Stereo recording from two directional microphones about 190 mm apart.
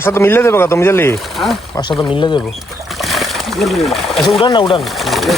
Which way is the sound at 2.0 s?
25° left (ahead or behind).